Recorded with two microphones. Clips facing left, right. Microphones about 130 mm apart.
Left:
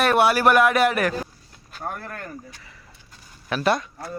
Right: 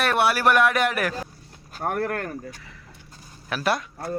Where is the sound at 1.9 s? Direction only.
65° right (ahead or behind).